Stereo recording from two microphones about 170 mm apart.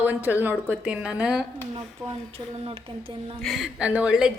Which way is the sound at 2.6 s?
35° right (ahead or behind).